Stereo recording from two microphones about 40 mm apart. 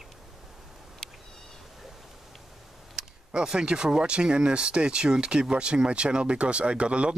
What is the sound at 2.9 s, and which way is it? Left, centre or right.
Camera, centre.